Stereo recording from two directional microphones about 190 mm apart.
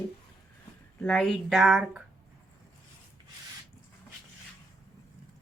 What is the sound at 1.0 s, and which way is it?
Speech, 5° left (ahead or behind).